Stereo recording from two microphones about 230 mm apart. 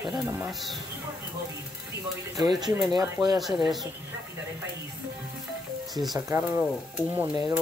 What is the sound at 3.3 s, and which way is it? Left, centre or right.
Speech, centre.